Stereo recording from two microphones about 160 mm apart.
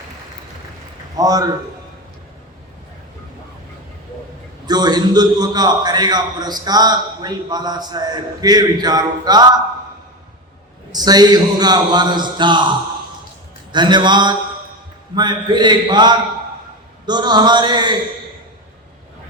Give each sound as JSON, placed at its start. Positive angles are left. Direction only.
{"t": 1.1, "sound": "a man's voice", "side_deg": -20}
{"t": 4.6, "sound": "a man's voice", "side_deg": -25}
{"t": 10.9, "sound": "a man's voice", "side_deg": -25}
{"t": 13.7, "sound": "a man's voice", "side_deg": -30}